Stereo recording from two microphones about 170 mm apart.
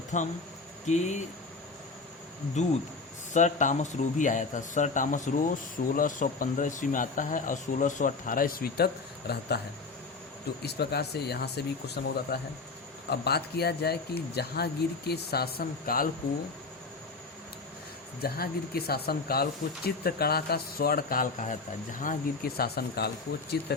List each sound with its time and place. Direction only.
0.1 s speech: 45° left (ahead or behind)
2.6 s speech: 45° left (ahead or behind); by 9.6 s 70° left (ahead or behind)
10.6 s speech: 70° left (ahead or behind)
18.2 s speech: 65° left (ahead or behind)